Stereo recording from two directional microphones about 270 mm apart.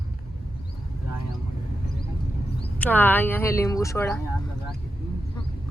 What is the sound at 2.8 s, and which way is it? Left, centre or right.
Speech, centre.